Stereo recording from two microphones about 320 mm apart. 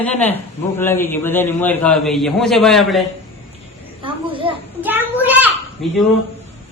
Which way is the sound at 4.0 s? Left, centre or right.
Centre.